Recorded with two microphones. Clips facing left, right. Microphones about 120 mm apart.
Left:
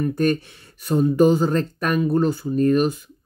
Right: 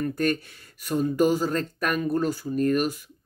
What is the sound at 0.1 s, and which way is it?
Speech, 25° left (ahead or behind).